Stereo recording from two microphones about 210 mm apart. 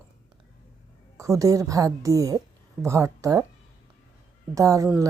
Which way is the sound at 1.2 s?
15° right (ahead or behind).